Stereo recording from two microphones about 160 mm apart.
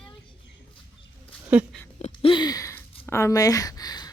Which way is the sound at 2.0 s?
40° left (ahead or behind).